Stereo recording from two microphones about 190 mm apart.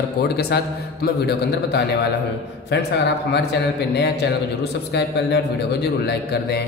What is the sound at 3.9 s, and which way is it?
A man's voice, 60° left (ahead or behind).